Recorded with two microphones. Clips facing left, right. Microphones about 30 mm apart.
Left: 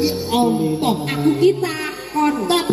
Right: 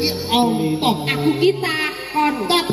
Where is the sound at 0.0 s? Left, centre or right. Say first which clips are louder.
Even; right.